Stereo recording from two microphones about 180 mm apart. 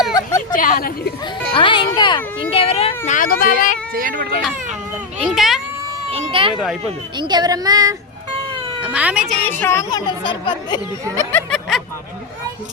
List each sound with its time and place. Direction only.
0.1 s a sound: 20° left (ahead or behind)
0.5 s speech: 50° left (ahead or behind)
1.5 s speech: 30° left (ahead or behind)
3.1 s speech: 50° left (ahead or behind)
3.9 s speech: 50° right (ahead or behind)
5.2 s a child's voice: centre (ahead or behind)
6.1 s speech: 30° right (ahead or behind)
6.5 s a child's voice: centre (ahead or behind)
7.2 s speech: 25° right (ahead or behind)
8.8 s speech: 10° right (ahead or behind)
9.5 s a woman's voice: 15° left (ahead or behind)
11.3 s speech: 10° left (ahead or behind)